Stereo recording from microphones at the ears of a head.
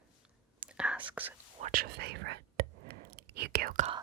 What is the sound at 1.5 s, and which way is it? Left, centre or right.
Whispering, right.